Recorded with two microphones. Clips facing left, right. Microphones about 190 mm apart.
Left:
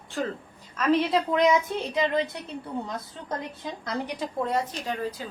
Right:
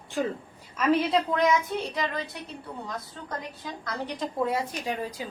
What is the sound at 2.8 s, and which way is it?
A woman's voice, 20° left (ahead or behind).